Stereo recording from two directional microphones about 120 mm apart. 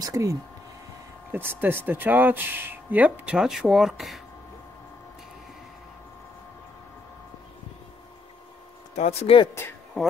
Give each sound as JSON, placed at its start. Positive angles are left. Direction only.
{"t": 0.0, "sound": "speech", "side_deg": -25}
{"t": 1.3, "sound": "speech", "side_deg": -15}
{"t": 8.9, "sound": "speech", "side_deg": 65}